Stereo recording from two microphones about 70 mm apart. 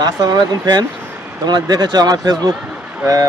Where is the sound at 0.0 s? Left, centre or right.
Right.